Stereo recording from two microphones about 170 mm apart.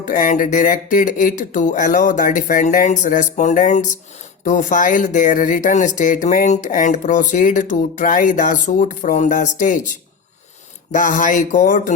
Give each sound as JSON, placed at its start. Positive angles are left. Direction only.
{"t": 0.0, "sound": "speech", "side_deg": 50}